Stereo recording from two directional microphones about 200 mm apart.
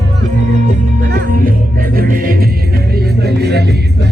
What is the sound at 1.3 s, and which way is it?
Music, 45° right (ahead or behind).